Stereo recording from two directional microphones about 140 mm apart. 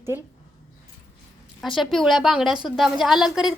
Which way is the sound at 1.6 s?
Centre (ahead or behind).